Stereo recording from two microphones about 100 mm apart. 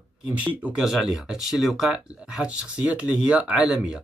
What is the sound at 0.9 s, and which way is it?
Speech, centre (ahead or behind).